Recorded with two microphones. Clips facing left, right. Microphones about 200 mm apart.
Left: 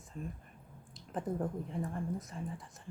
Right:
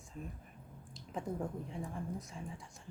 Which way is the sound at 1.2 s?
Centre (ahead or behind).